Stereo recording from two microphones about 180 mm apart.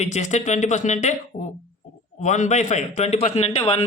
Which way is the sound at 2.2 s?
40° left (ahead or behind).